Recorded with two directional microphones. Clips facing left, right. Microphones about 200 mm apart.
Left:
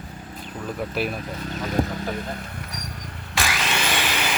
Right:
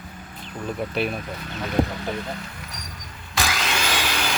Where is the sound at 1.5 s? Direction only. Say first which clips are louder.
Right 1 dB; 40° left (ahead or behind).